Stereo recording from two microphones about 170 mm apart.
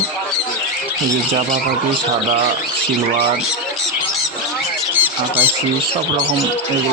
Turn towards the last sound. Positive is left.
turn(degrees=-10)  # may be behind; listen again after turning